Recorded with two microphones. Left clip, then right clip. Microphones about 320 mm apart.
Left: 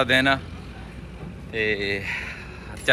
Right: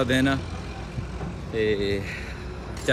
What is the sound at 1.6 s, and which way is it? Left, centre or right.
Speech, centre.